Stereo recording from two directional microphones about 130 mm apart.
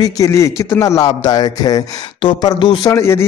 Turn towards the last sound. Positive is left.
turn(degrees=20)  # may be behind; listen again after turning